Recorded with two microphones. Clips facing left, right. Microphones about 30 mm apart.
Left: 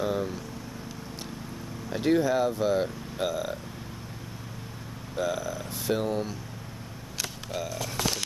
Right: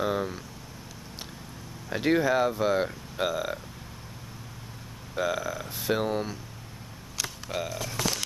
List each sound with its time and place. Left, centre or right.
0.0 s vehicle: centre
1.9 s speech: centre
5.1 s speech: centre
7.7 s speech: centre